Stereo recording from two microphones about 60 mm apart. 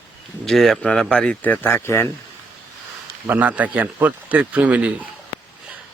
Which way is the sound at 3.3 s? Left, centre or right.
Right.